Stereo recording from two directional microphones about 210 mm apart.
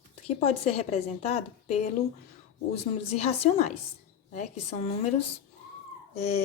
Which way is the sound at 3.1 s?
30° left (ahead or behind).